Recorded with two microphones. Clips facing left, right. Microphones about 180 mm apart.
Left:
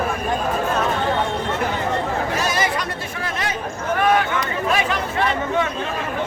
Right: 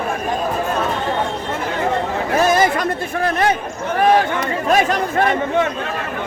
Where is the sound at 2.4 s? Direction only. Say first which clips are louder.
Right 7 dB; 50° right (ahead or behind).